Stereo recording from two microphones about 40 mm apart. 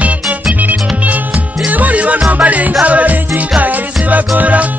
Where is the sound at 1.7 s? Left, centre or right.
Right.